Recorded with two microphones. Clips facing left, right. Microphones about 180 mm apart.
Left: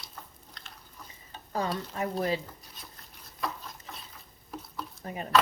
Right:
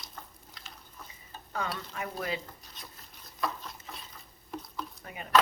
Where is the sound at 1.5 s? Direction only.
35° left (ahead or behind).